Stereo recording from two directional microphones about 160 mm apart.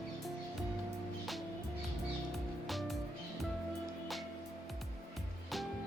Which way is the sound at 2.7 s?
Centre (ahead or behind).